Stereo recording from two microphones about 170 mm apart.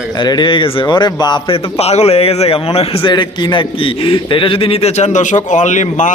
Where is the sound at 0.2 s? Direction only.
25° left (ahead or behind).